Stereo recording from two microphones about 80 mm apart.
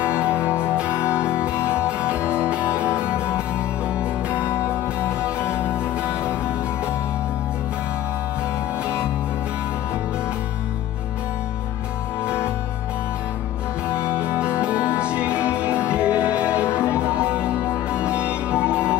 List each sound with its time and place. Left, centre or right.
0.0 s music: centre
13.8 s music: centre